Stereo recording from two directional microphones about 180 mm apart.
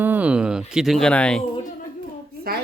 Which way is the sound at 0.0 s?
10° right (ahead or behind).